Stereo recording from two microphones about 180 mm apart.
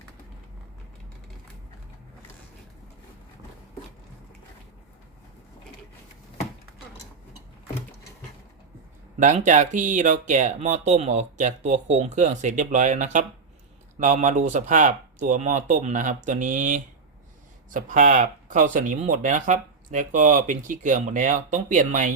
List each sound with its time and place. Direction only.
9.1 s speech: 45° right (ahead or behind)